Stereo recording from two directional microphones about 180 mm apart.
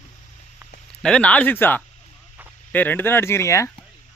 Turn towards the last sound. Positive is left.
turn(degrees=15)  # may be behind; listen again after turning